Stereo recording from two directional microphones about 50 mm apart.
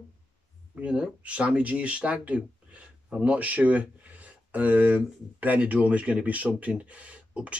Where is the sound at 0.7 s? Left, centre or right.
Right.